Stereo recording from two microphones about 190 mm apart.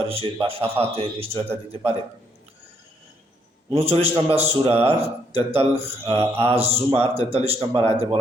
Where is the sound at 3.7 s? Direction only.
30° right (ahead or behind).